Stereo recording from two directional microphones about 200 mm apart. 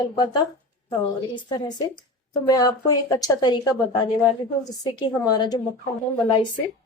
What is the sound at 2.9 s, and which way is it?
A woman's voice, 20° left (ahead or behind).